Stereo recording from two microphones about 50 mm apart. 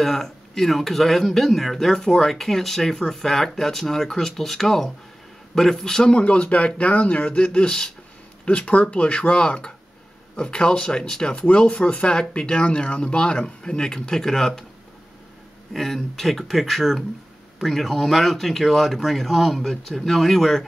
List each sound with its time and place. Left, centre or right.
0.0 s speech: centre
6.1 s speech: left; by 14.6 s centre
15.7 s speech: centre